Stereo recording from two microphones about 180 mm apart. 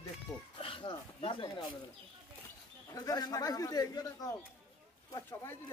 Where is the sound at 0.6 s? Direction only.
30° left (ahead or behind).